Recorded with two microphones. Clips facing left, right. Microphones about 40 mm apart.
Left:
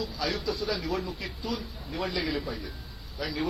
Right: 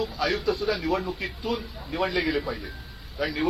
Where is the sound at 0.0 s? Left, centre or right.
Right.